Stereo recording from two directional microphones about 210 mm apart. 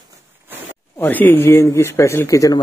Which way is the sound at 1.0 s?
10° left (ahead or behind).